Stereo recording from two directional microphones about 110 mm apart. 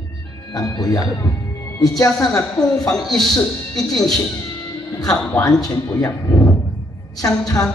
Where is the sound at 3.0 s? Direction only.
Centre (ahead or behind).